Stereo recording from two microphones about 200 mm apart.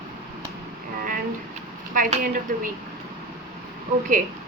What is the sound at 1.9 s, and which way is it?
Speech, 40° right (ahead or behind).